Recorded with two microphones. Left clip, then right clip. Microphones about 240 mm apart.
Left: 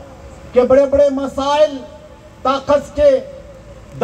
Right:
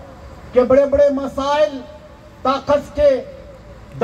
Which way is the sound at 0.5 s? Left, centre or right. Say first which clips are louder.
Left 2 dB; right.